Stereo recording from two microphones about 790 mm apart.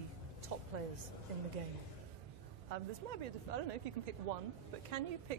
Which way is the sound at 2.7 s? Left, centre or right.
Right.